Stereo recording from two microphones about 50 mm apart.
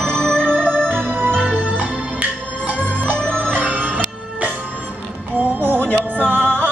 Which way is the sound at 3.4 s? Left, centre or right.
Right.